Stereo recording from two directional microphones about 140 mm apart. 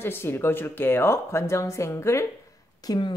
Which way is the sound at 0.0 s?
15° left (ahead or behind).